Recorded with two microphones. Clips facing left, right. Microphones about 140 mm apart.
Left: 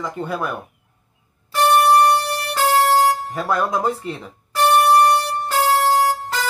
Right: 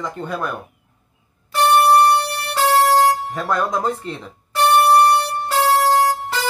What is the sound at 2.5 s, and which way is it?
Music, 35° right (ahead or behind).